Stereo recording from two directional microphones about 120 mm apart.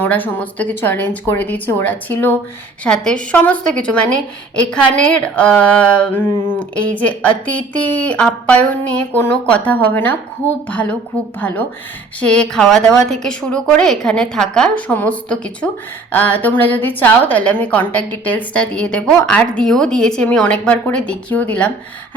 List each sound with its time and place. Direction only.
0.0 s a woman's voice: 15° left (ahead or behind)